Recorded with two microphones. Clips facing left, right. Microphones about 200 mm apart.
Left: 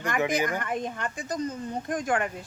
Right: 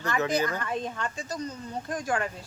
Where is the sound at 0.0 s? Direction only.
15° left (ahead or behind).